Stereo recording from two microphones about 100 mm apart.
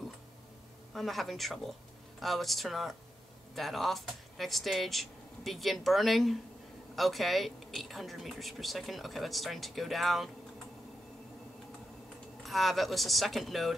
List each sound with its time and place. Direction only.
0.9 s speech: centre (ahead or behind)
12.4 s speech: centre (ahead or behind)